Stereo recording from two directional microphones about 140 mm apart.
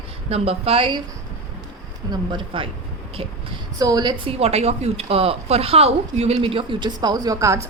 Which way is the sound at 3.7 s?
25° right (ahead or behind).